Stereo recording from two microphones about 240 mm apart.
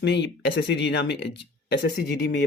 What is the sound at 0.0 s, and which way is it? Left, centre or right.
Speech, left.